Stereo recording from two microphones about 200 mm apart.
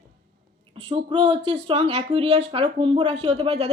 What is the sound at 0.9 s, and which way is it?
Speech, 25° right (ahead or behind).